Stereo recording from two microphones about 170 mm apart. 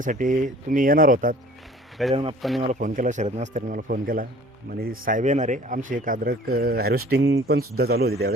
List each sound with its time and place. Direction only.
0.0 s speech: 50° right (ahead or behind)
2.0 s speech: centre (ahead or behind)
2.7 s speech: 50° right (ahead or behind)